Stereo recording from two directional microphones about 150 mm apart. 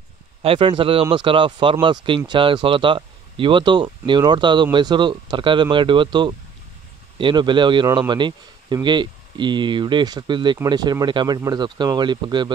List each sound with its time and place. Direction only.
0.4 s speech: 35° right (ahead or behind)